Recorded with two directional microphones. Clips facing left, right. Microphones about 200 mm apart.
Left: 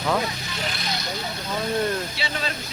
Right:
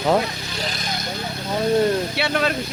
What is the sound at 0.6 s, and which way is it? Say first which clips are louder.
Vehicle: right 2 dB; 40° right (ahead or behind).